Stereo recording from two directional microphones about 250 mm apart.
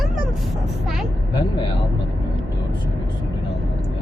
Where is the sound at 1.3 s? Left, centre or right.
Centre.